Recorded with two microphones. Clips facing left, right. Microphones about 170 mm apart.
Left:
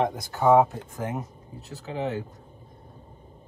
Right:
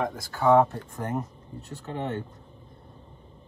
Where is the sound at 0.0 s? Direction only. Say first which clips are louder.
Left 2 dB; 20° left (ahead or behind).